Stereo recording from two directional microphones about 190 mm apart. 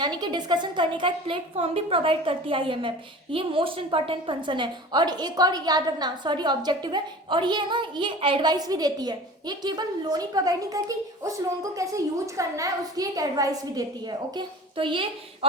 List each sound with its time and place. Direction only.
0.0 s a woman's voice: 20° right (ahead or behind)